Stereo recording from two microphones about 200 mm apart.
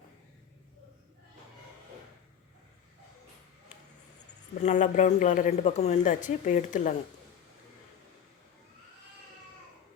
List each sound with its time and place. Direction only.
4.6 s a woman's voice: 35° left (ahead or behind)